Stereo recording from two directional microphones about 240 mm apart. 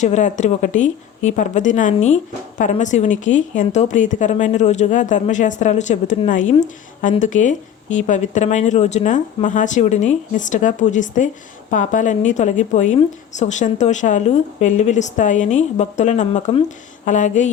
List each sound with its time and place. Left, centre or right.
0.0 s a woman's voice: left